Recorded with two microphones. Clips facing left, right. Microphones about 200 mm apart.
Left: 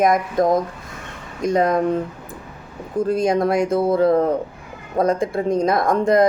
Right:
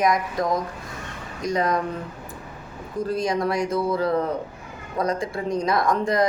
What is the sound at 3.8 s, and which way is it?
Speech, 50° left (ahead or behind).